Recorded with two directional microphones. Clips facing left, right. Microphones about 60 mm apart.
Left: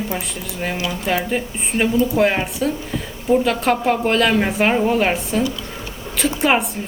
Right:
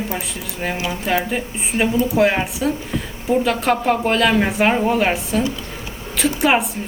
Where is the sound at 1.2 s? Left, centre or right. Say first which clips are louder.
Left 1 dB; centre.